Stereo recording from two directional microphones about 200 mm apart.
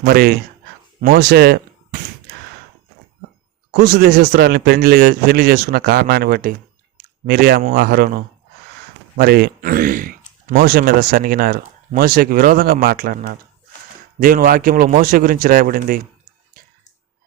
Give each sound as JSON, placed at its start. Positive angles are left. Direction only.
{"t": 0.0, "sound": "a man's voice", "side_deg": -50}
{"t": 3.7, "sound": "a man's voice", "side_deg": -50}
{"t": 16.6, "sound": "a sound", "side_deg": -45}